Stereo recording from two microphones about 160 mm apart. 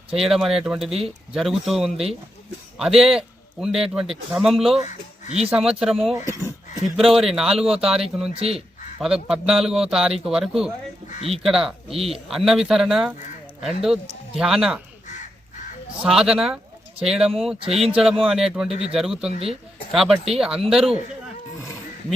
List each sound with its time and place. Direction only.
0.1 s a man's voice: centre (ahead or behind)
8.3 s speech: 40° right (ahead or behind)
9.0 s a man's voice: centre (ahead or behind)
11.9 s speech: 35° right (ahead or behind)
12.3 s a man's voice: centre (ahead or behind)
16.0 s a man's voice: centre (ahead or behind)
19.3 s speech: 40° right (ahead or behind)
19.9 s a man's voice: centre (ahead or behind)